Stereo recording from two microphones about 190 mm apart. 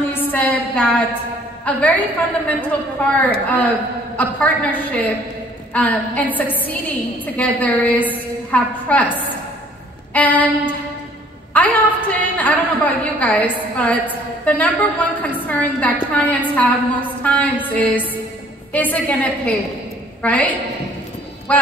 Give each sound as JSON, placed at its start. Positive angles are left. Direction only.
{"t": 0.1, "sound": "a woman's voice", "side_deg": 10}
{"t": 3.2, "sound": "a woman's voice", "side_deg": 10}